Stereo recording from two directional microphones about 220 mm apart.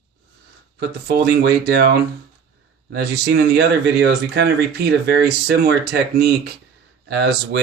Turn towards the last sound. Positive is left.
turn(degrees=-50)  # may be behind; listen again after turning